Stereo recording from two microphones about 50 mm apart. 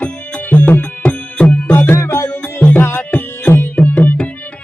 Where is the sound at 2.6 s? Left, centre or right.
Left.